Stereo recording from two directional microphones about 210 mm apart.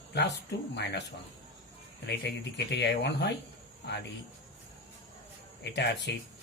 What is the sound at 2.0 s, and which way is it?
Speech, 55° left (ahead or behind).